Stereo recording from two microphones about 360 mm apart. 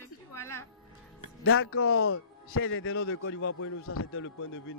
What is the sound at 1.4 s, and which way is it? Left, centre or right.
Speech, left.